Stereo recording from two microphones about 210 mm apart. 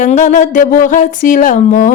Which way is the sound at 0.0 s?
35° left (ahead or behind).